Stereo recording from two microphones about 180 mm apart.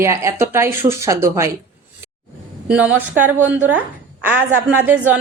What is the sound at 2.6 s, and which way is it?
A woman's voice, 5° right (ahead or behind).